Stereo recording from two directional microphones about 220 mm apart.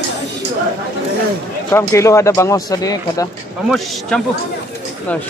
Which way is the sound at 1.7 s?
10° left (ahead or behind).